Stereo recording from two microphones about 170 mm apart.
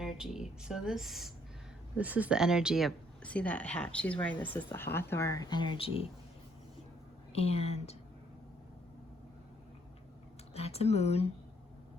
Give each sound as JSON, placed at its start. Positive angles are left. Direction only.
{"t": 0.0, "sound": "speech", "side_deg": 0}
{"t": 7.3, "sound": "speech", "side_deg": 35}
{"t": 10.5, "sound": "speech", "side_deg": 35}